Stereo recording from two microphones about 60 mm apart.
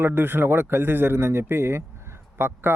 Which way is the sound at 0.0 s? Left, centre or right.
Right.